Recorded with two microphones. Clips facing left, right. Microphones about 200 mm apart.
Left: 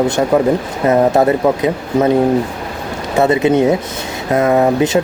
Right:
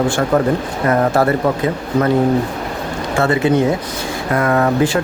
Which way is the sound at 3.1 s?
20° left (ahead or behind).